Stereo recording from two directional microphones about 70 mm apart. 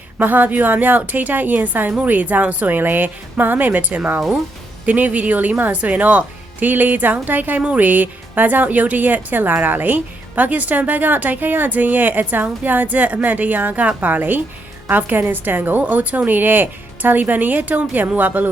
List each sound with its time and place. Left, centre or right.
0.2 s speech: right